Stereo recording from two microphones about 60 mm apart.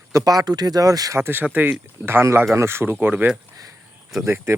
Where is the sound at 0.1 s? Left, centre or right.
Right.